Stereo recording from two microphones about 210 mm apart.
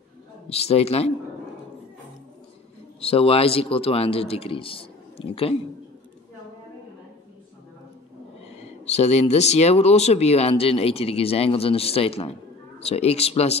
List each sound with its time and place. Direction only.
0.5 s speech: 30° left (ahead or behind)
3.0 s speech: 25° left (ahead or behind)
8.5 s speech: 30° left (ahead or behind)